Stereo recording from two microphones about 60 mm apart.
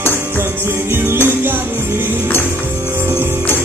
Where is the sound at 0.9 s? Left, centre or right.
Right.